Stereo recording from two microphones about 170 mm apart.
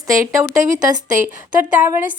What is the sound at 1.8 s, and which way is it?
Speech, 10° right (ahead or behind).